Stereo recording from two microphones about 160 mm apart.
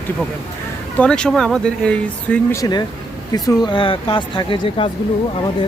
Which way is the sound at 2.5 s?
25° left (ahead or behind).